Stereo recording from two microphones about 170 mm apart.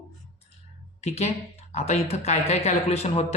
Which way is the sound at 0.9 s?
40° left (ahead or behind).